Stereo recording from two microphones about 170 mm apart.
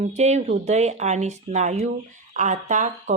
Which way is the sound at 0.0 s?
40° right (ahead or behind).